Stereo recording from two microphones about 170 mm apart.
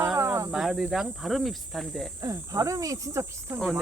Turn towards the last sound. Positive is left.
turn(degrees=0)  # may be behind; listen again after turning